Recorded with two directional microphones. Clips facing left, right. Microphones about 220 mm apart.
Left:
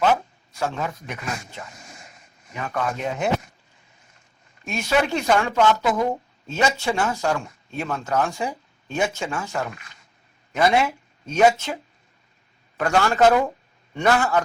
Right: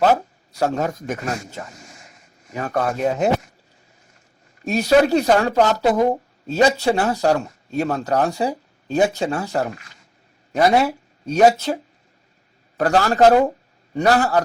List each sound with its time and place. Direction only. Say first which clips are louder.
0.0 s speech: right 3 dB; 40° right (ahead or behind)
4.6 s speech: right 7 dB; 35° right (ahead or behind)